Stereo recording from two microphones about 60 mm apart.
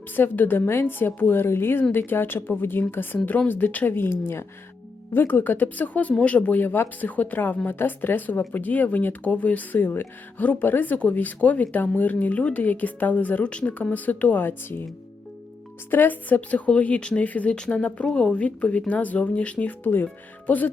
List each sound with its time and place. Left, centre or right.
0.2 s a woman's voice: left
15.9 s speech: left
17.5 s speech: centre; by 20.1 s left